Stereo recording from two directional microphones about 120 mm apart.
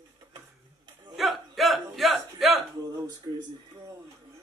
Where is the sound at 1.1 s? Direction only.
Centre (ahead or behind).